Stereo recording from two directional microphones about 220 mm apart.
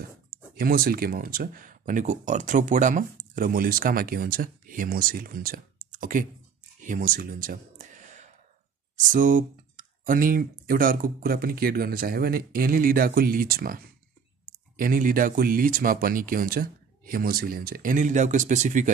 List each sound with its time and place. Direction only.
0.6 s speech: 40° right (ahead or behind)
6.8 s a sound: 35° right (ahead or behind)
9.1 s speech: 35° right (ahead or behind)
14.8 s speech: 40° right (ahead or behind)